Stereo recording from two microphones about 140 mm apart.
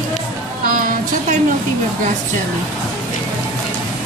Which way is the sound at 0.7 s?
80° right.